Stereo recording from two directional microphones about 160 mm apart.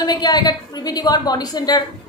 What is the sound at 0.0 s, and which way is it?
A woman's voice, 25° left (ahead or behind).